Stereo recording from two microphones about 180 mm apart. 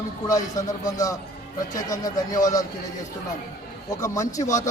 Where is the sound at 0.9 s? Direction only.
20° left (ahead or behind).